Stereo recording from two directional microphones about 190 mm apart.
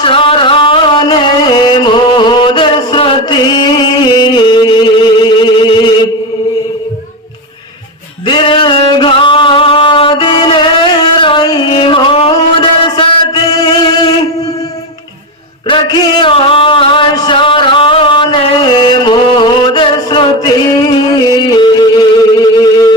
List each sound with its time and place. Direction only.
0.0 s music: 30° left (ahead or behind)
8.3 s music: 25° left (ahead or behind)
15.6 s a sound: 25° left (ahead or behind)
21.3 s music: 20° left (ahead or behind)